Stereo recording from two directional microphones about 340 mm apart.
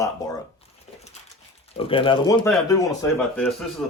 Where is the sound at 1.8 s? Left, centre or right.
Centre.